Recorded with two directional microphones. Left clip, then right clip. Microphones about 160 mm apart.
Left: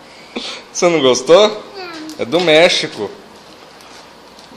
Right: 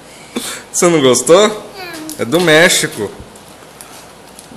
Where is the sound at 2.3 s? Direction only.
10° right (ahead or behind).